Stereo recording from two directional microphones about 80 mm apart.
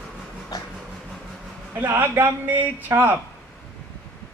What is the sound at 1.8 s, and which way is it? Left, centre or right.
Speech, right.